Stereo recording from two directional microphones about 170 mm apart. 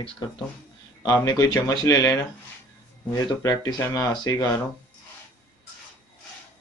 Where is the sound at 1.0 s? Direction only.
20° left (ahead or behind).